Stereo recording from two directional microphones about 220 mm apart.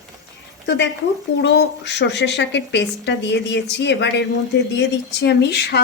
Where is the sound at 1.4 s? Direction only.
50° left (ahead or behind).